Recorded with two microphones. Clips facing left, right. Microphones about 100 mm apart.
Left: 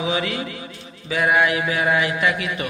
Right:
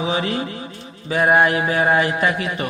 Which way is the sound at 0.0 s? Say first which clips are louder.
Right 2 dB; 35° right (ahead or behind).